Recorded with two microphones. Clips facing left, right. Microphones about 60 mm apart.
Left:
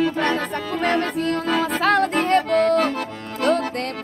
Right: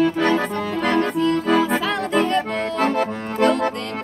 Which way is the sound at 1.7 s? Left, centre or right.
Left.